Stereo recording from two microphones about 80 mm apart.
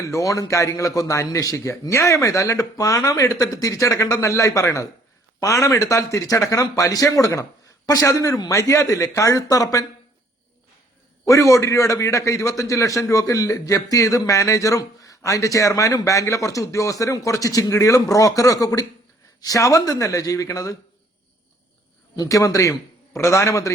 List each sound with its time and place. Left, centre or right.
0.0 s a man's voice: left
11.3 s a man's voice: left
22.1 s a man's voice: left